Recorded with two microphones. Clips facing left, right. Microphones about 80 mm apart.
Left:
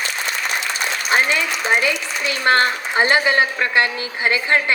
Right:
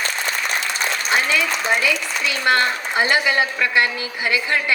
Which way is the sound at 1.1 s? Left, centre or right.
Left.